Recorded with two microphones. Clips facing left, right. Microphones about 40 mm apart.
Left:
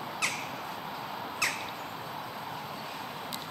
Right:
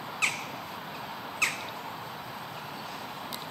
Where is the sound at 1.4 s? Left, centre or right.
Right.